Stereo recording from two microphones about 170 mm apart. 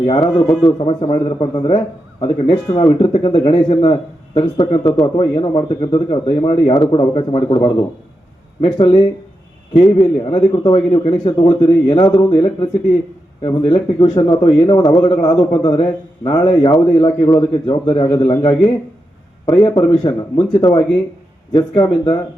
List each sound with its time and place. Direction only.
0.1 s a man's voice: 30° left (ahead or behind)